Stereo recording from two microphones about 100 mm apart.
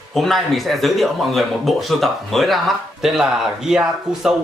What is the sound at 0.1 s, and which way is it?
Speech, centre (ahead or behind).